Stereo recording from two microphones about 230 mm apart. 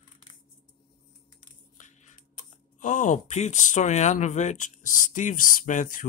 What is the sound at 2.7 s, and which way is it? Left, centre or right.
Speech, left.